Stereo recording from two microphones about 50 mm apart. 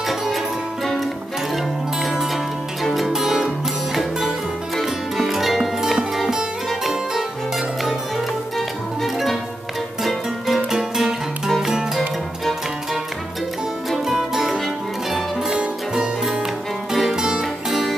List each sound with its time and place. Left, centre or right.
1.5 s zither: centre
3.1 s music: centre
14.0 s music: centre